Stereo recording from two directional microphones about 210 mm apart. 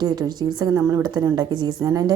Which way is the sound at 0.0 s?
20° right (ahead or behind).